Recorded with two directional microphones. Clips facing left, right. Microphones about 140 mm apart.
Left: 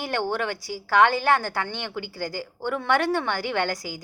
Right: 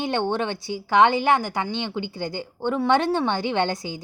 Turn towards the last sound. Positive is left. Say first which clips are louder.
# right 3 dB
turn(degrees=-25)  # may be behind; listen again after turning